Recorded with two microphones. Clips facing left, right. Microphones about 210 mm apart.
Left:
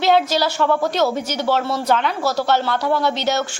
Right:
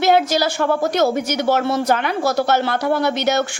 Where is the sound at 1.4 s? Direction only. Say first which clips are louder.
Right 2 dB; 50° right (ahead or behind).